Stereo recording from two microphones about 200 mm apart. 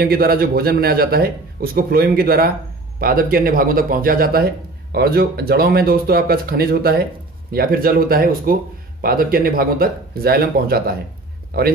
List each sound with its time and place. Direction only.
0.0 s speech: 50° right (ahead or behind)